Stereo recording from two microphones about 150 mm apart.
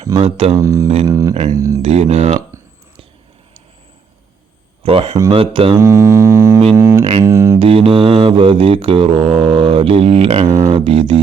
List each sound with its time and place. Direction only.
0.1 s mantra: 40° right (ahead or behind)
0.5 s music: 20° right (ahead or behind)
1.8 s speech: 45° right (ahead or behind)
4.8 s speech: 40° right (ahead or behind)
5.3 s mantra: 35° right (ahead or behind)
5.7 s music: 20° right (ahead or behind)
6.7 s speech: 15° right (ahead or behind)
7.0 s mantra: 40° right (ahead or behind)
7.3 s music: 20° right (ahead or behind)
7.6 s mantra: 40° right (ahead or behind)